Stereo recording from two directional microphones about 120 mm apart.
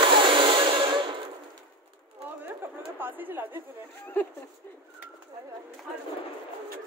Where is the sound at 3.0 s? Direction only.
15° right (ahead or behind).